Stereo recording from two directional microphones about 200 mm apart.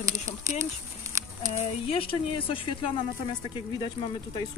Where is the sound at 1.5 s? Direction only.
30° left (ahead or behind).